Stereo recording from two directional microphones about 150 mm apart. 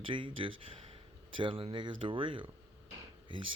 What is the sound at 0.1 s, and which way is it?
Speech, 35° right (ahead or behind).